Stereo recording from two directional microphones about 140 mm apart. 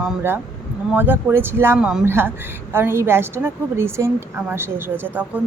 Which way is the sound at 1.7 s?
5° right (ahead or behind).